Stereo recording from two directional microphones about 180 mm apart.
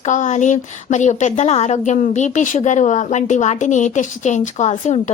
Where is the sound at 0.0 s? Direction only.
40° left (ahead or behind).